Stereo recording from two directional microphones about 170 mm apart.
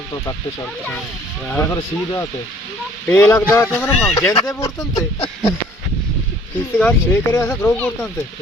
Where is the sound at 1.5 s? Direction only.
15° left (ahead or behind).